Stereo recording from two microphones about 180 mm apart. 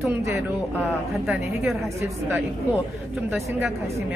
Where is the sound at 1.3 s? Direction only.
Centre (ahead or behind).